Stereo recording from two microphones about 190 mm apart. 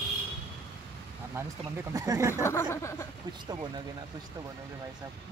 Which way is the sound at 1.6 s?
20° right (ahead or behind).